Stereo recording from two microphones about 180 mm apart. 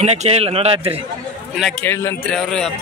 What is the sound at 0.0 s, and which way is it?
A man's voice, 35° right (ahead or behind).